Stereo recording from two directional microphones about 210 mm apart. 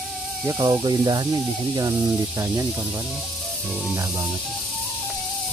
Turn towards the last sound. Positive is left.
turn(degrees=-10)  # may be behind; listen again after turning